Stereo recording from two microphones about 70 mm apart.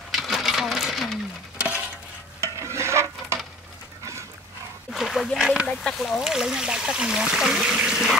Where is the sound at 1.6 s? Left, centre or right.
Centre.